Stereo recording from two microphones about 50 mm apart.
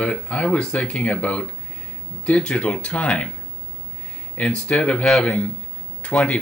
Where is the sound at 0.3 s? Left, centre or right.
Left.